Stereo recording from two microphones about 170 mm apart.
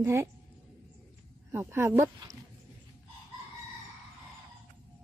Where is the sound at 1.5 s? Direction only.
15° right (ahead or behind).